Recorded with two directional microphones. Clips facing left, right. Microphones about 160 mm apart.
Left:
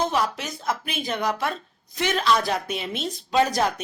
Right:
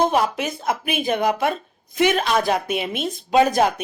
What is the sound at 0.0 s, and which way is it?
Speech, 55° right (ahead or behind).